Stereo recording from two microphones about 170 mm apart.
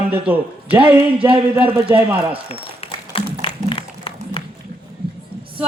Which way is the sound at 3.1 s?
30° left (ahead or behind).